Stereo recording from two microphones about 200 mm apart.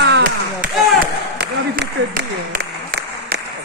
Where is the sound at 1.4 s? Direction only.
55° right (ahead or behind).